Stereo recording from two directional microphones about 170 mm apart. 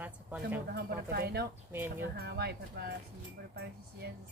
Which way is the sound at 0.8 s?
70° right (ahead or behind).